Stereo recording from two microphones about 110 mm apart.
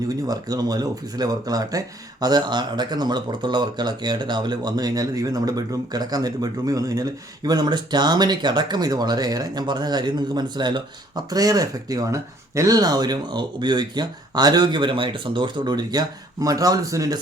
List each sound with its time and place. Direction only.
0.3 s speech: 35° right (ahead or behind)